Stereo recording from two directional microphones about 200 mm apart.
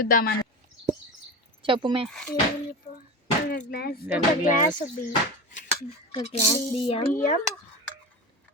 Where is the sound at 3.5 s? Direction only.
50° left (ahead or behind).